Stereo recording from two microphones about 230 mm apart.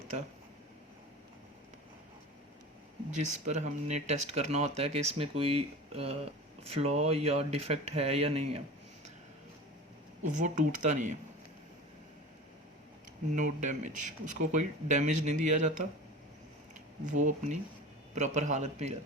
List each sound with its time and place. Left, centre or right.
3.4 s speech: right
10.3 s speech: right
13.3 s speech: right
17.1 s speech: right